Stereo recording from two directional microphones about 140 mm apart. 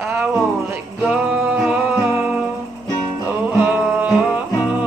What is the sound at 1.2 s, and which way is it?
Music, 10° right (ahead or behind).